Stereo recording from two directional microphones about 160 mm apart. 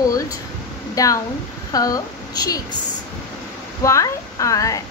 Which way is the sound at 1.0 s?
20° left (ahead or behind).